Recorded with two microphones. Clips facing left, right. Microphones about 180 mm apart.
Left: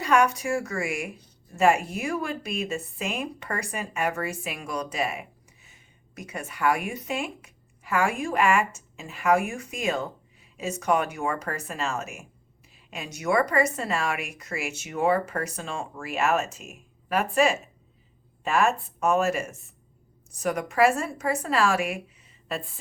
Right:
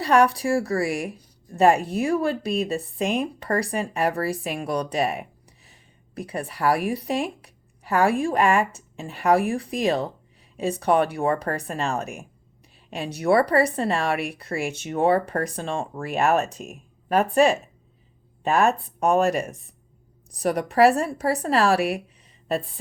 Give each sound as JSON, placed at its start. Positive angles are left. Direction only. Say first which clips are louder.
{"t": 0.0, "sound": "speech", "louder": "right 3 dB", "side_deg": -35}